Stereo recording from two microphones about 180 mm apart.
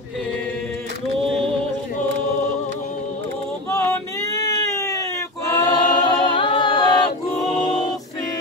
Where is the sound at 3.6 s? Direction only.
15° left (ahead or behind).